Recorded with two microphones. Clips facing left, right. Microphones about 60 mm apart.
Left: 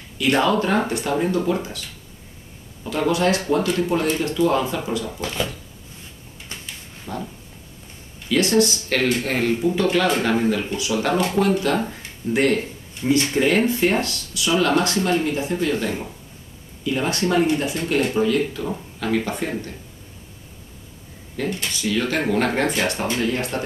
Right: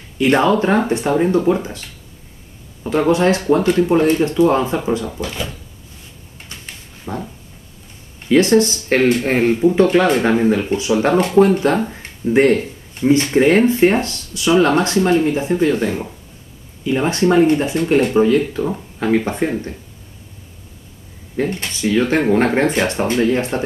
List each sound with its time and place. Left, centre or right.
0.2 s speech: right
7.1 s a sound: right
8.3 s speech: right
12.0 s a sound: right
12.5 s speech: right
21.4 s speech: right